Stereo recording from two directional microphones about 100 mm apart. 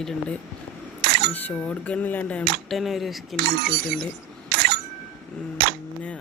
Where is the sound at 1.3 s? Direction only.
10° left (ahead or behind).